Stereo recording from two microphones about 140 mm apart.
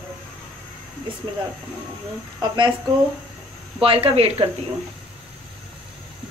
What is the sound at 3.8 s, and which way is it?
Speech, 40° right (ahead or behind).